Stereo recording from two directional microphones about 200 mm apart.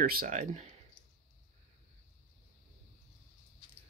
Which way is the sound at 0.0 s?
45° right (ahead or behind).